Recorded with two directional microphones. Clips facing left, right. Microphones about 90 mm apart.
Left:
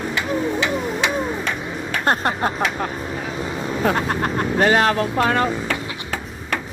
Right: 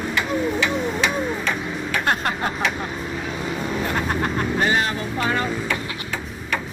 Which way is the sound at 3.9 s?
40° left (ahead or behind).